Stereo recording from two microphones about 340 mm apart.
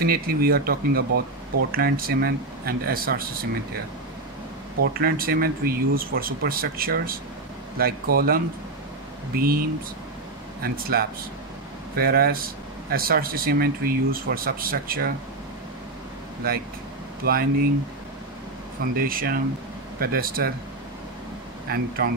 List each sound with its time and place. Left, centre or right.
0.0 s speech: right
4.9 s speech: right
16.4 s speech: right
18.9 s speech: right
21.6 s speech: right